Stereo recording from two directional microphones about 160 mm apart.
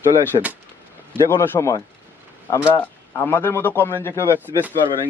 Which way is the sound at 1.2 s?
15° left (ahead or behind).